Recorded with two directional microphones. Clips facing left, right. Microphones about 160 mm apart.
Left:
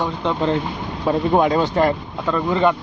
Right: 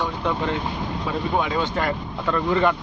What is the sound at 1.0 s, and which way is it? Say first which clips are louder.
Speech: left 8 dB; 45° left (ahead or behind).